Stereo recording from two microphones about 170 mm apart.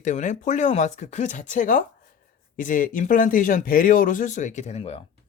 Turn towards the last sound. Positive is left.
turn(degrees=35)  # may be behind; listen again after turning